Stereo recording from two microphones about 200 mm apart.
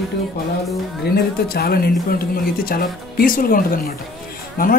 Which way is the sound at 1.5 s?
50° left (ahead or behind).